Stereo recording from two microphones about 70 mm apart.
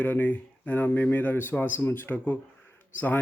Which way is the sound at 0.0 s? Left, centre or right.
Left.